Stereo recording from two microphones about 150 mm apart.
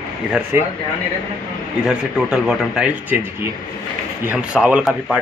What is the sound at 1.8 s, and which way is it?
Speech, 5° right (ahead or behind).